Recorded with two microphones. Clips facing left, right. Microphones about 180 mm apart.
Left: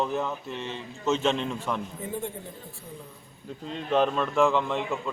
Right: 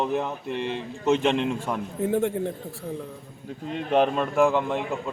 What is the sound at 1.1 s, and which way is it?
Speech, 15° right (ahead or behind).